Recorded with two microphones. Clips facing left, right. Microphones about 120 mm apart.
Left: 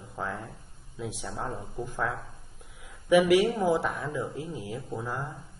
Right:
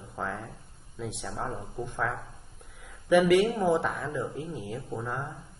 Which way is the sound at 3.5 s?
Centre (ahead or behind).